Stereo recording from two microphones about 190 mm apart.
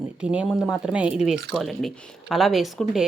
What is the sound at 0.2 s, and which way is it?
A woman's voice, 5° right (ahead or behind).